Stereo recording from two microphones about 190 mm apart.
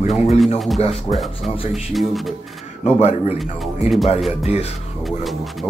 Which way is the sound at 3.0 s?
35° left (ahead or behind).